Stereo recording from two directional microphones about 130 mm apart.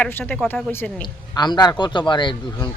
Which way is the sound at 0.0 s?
15° left (ahead or behind).